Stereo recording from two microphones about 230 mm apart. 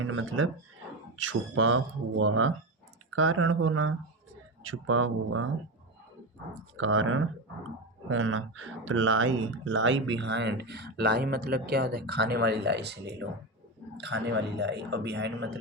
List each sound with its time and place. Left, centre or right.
0.0 s speech: right
6.5 s speech: right